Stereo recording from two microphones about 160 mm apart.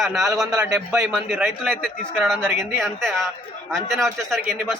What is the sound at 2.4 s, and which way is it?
Speech, 15° right (ahead or behind).